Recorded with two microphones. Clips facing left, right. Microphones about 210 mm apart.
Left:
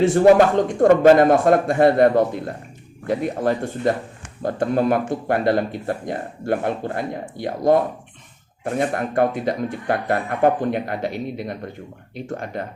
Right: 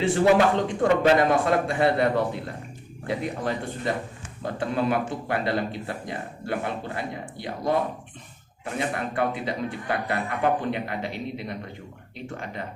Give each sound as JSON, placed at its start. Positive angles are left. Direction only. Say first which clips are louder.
{"t": 0.0, "sound": "speech", "louder": "left 6 dB", "side_deg": 45}